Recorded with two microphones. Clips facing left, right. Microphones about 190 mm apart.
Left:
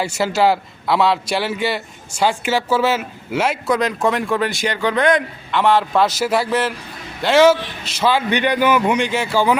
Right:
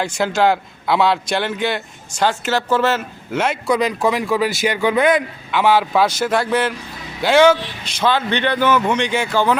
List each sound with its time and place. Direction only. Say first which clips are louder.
0.0 s a man's voice: even; 5° left (ahead or behind)